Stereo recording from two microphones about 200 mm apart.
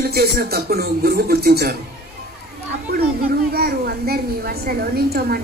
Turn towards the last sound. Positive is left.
turn(degrees=-50)  # may be behind; listen again after turning